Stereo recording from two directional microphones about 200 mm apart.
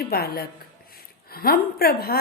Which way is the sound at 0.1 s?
50° left (ahead or behind).